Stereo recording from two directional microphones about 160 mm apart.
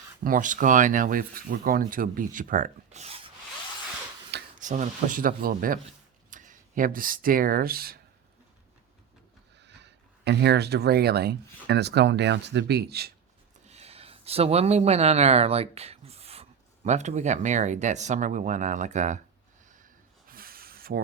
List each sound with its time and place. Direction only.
0.3 s speech: 55° right (ahead or behind)
4.6 s speech: 50° right (ahead or behind); by 7.9 s 70° right (ahead or behind)
9.6 s speech: 90° right
13.7 s speech: 40° right (ahead or behind)
20.2 s a sound: 65° right (ahead or behind)